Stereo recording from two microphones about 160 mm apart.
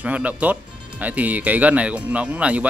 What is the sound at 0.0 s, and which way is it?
Speech, 10° right (ahead or behind).